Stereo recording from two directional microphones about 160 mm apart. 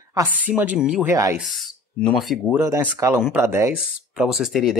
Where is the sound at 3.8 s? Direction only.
Centre (ahead or behind).